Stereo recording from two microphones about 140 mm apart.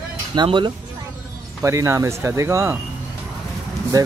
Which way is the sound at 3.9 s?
25° right (ahead or behind).